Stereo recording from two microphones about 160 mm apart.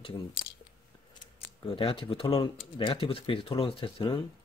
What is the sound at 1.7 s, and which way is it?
Speech, 35° left (ahead or behind).